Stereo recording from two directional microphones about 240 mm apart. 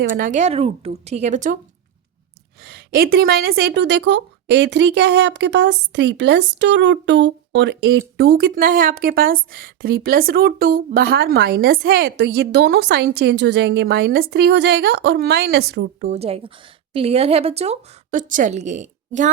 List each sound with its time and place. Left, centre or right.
0.0 s a woman's voice: right
2.6 s a woman's voice: right
16.0 s a woman's voice: right